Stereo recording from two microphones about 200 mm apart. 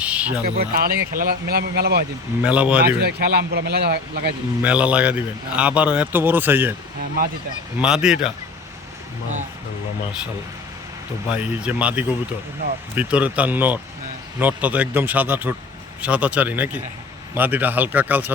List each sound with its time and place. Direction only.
0.0 s a sound: 5° right (ahead or behind)
0.4 s speech: 45° right (ahead or behind)
2.4 s a man's voice: 5° right (ahead or behind)
2.8 s speech: 50° right (ahead or behind)
4.6 s a man's voice: 5° right (ahead or behind)
7.8 s speech: 5° right (ahead or behind)
11.3 s a man's voice: 5° right (ahead or behind)